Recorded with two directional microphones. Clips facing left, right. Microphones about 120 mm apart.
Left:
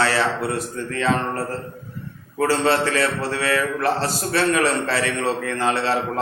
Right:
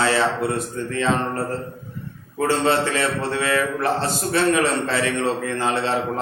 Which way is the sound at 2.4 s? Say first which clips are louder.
Even; 20° right (ahead or behind).